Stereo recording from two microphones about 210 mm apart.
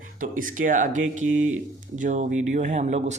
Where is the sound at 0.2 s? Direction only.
40° right (ahead or behind).